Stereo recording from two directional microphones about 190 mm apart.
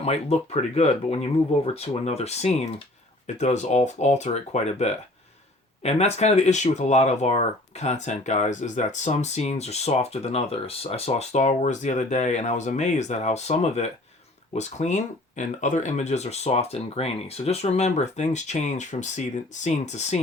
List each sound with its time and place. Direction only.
0.0 s speech: 35° left (ahead or behind)